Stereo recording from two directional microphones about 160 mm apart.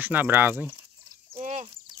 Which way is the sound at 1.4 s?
50° right (ahead or behind).